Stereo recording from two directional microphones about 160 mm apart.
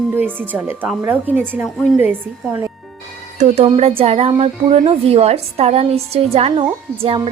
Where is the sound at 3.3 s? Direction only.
45° right (ahead or behind).